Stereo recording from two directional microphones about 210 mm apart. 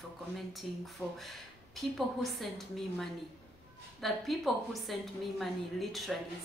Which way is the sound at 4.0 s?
Centre (ahead or behind).